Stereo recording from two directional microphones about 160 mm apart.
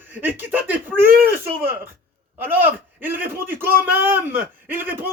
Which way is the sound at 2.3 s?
10° right (ahead or behind).